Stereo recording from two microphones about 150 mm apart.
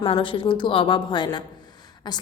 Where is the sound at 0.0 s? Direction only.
35° left (ahead or behind).